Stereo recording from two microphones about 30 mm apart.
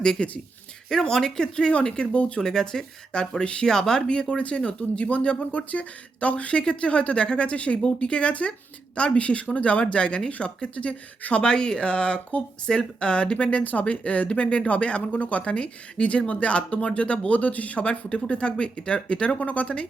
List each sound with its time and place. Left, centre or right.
0.2 s speech: left
0.9 s speech: centre
2.0 s speech: left
2.4 s speech: centre
3.1 s speech: left
3.7 s speech: centre; by 7.8 s left
7.8 s speech: left
10.8 s speech: left
11.4 s speech: left
13.8 s speech: left
17.7 s speech: left
19.4 s speech: left